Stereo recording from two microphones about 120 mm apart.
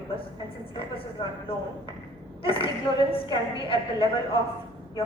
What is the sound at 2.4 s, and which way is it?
A woman's voice, 50° left (ahead or behind).